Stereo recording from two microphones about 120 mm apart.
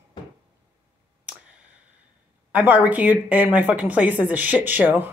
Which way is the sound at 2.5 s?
15° right (ahead or behind).